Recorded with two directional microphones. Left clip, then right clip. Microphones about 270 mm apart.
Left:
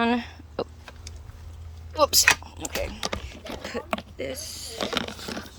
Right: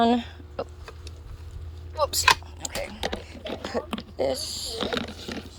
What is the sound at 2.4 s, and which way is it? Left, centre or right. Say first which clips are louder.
Mechanisms: left 2 dB; left.